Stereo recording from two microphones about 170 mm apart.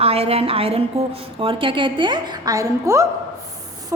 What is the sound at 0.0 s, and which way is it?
A woman's voice, 35° right (ahead or behind).